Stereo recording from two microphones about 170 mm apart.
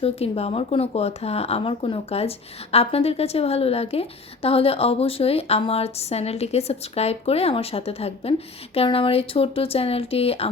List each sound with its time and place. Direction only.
0.0 s a woman's voice: 35° left (ahead or behind)